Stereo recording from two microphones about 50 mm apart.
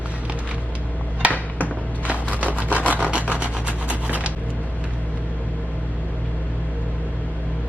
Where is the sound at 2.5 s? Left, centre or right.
Right.